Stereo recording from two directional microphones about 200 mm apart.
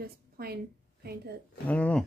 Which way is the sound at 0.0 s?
50° right (ahead or behind).